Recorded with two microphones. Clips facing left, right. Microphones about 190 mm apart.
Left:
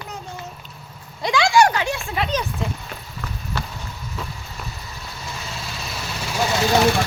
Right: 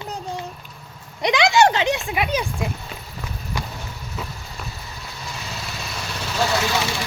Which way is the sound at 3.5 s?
15° right (ahead or behind).